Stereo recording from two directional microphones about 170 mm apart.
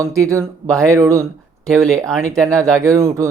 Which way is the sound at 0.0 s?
20° right (ahead or behind).